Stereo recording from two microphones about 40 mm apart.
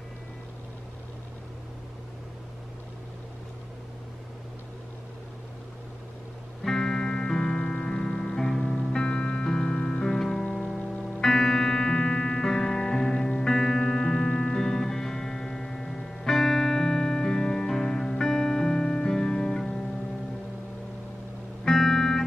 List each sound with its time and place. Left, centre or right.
6.6 s music: centre
21.6 s music: centre